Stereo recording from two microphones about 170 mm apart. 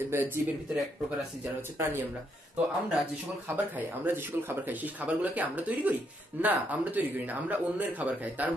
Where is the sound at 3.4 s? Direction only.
10° right (ahead or behind).